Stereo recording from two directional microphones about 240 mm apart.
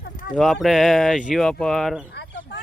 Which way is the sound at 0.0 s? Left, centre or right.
Left.